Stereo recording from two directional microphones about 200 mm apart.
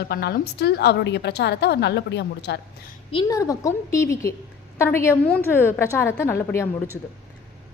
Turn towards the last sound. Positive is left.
turn(degrees=15)  # may be behind; listen again after turning